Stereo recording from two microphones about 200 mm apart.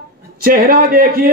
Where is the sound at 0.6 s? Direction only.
45° right (ahead or behind).